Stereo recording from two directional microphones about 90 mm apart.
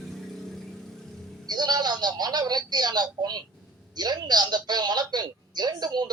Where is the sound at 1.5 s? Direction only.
50° right (ahead or behind).